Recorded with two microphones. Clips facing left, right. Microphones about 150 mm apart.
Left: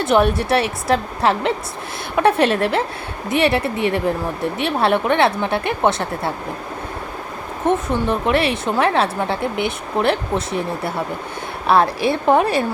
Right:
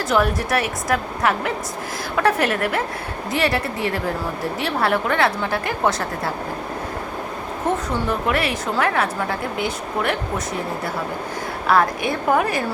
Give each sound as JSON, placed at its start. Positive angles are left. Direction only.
{"t": 0.0, "sound": "speech", "side_deg": 25}
{"t": 7.6, "sound": "speech", "side_deg": 20}